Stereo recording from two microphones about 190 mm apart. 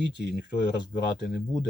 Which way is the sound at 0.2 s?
60° left (ahead or behind).